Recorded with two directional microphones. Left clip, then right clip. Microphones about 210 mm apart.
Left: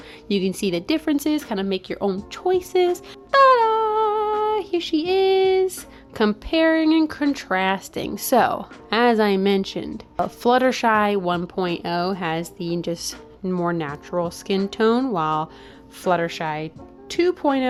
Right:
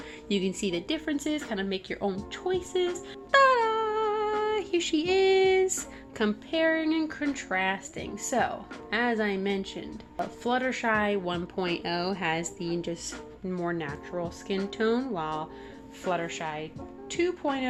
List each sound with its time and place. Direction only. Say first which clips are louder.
0.3 s speech: left 7 dB; 30° left (ahead or behind); by 2.8 s 50° left (ahead or behind)
3.3 s humming: left 7 dB; 35° left (ahead or behind)
4.4 s child singing: left 6 dB; 25° left (ahead or behind)
6.1 s speech: left 8 dB; 45° left (ahead or behind)